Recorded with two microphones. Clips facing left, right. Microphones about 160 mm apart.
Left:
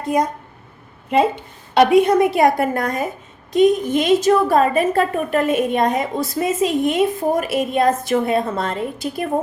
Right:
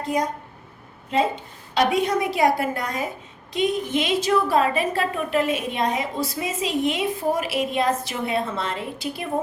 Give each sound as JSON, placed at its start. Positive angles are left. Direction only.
{"t": 1.7, "sound": "a woman's voice", "side_deg": 60}